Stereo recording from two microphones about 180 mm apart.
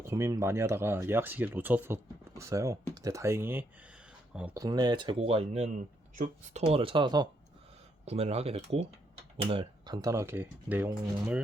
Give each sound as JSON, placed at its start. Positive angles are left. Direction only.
{"t": 0.0, "sound": "speech", "side_deg": -15}
{"t": 8.0, "sound": "speech", "side_deg": -35}